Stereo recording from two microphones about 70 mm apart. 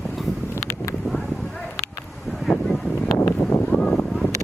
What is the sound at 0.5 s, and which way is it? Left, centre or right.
Wind, left.